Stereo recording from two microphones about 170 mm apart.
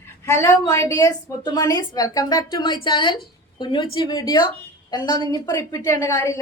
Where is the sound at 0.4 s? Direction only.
20° left (ahead or behind).